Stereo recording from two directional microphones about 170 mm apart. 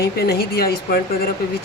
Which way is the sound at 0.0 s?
65° left (ahead or behind).